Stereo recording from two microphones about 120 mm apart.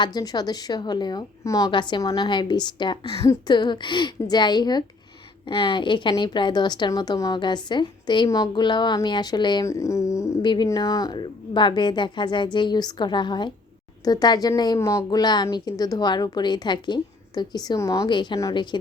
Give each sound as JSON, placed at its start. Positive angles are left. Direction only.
{"t": 0.0, "sound": "a woman's voice", "side_deg": 35}
{"t": 3.2, "sound": "speech", "side_deg": 25}
{"t": 3.5, "sound": "a woman's voice", "side_deg": 40}
{"t": 9.6, "sound": "speech", "side_deg": 25}
{"t": 10.4, "sound": "a woman's voice", "side_deg": 40}